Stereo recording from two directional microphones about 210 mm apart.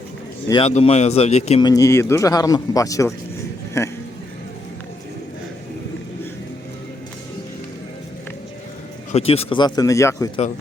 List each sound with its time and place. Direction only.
0.4 s speech: 20° left (ahead or behind)
1.6 s speech: 15° left (ahead or behind)
9.1 s speech: 30° left (ahead or behind)